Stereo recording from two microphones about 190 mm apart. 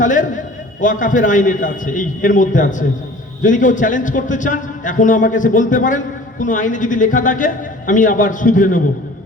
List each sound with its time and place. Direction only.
0.0 s a man's voice: 40° left (ahead or behind)